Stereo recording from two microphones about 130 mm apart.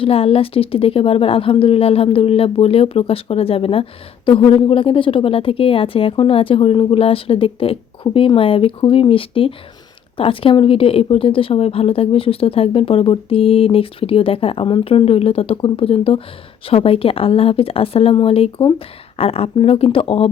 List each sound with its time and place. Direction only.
0.0 s a woman's voice: 50° left (ahead or behind)